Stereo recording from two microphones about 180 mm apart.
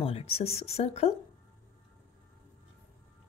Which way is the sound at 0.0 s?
35° left (ahead or behind).